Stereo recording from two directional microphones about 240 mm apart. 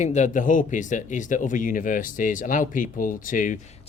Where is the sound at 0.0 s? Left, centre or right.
Left.